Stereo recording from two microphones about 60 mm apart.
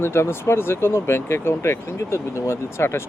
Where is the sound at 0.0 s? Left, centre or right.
Left.